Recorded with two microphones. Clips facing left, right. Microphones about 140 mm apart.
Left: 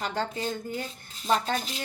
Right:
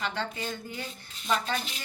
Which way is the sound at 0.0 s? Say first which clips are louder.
Left 3 dB; 40° left (ahead or behind).